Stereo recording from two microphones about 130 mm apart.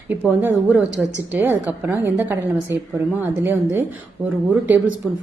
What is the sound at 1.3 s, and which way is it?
A woman's voice, 15° right (ahead or behind).